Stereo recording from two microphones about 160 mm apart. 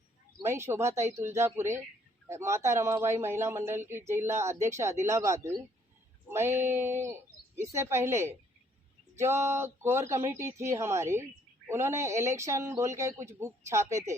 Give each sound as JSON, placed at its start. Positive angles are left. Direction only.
{"t": 0.4, "sound": "speech", "side_deg": -15}